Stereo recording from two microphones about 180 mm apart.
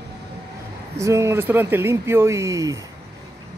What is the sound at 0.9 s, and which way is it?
Speech, 15° right (ahead or behind).